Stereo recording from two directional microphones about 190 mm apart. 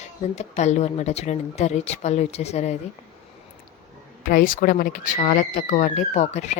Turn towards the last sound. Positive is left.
turn(degrees=35)  # may be behind; listen again after turning